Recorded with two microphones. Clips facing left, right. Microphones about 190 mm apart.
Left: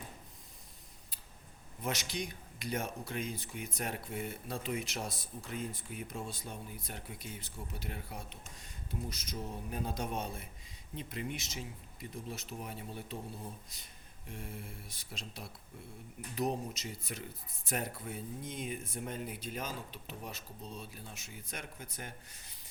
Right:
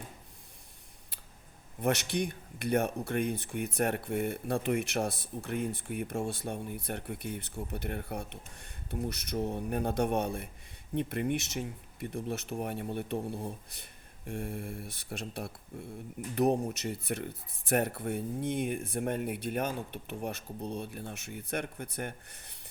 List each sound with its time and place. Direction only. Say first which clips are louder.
1.8 s speech: right 8 dB; 60° right (ahead or behind)